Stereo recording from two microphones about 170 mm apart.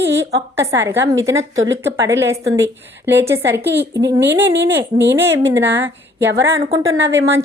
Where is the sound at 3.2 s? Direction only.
15° right (ahead or behind).